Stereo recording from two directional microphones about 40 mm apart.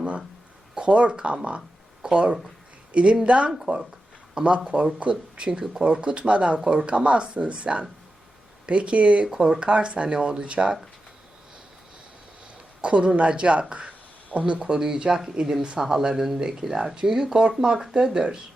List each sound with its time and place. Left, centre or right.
0.8 s speech: right
2.0 s a sound: centre
2.9 s speech: right
9.2 s speech: centre
9.6 s speech: right
12.8 s speech: right